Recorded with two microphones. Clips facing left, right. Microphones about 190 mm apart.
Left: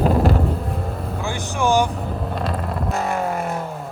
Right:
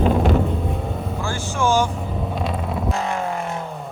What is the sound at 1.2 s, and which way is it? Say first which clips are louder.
Vehicle: left 1 dB; 15° left (ahead or behind).